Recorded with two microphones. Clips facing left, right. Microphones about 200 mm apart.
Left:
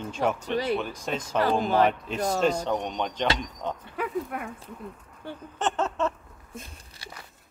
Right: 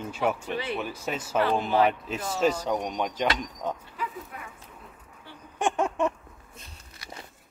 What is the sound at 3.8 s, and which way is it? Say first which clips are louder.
Speech: left 7 dB; 60° left (ahead or behind).